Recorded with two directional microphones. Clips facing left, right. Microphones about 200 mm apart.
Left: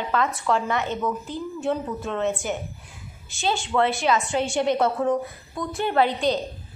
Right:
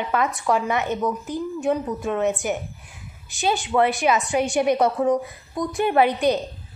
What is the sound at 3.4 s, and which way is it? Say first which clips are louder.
A woman's voice: right 2 dB; 15° right (ahead or behind).